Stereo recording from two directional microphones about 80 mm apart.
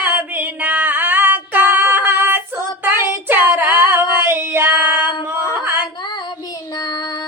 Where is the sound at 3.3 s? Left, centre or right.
Right.